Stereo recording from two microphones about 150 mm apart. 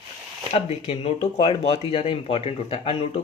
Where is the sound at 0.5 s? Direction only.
40° left (ahead or behind).